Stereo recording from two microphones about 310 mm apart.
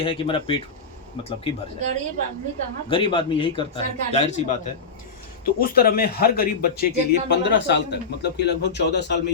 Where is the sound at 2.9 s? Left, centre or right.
Centre.